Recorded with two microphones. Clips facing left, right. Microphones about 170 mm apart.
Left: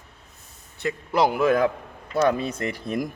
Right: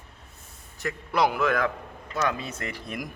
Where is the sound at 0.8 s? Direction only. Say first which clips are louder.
Left 3 dB; 30° left (ahead or behind).